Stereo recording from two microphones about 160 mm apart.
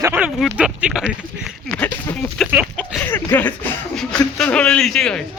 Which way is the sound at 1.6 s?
5° left (ahead or behind).